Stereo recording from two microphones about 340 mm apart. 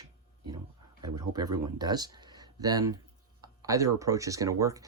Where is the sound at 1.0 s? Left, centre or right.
Centre.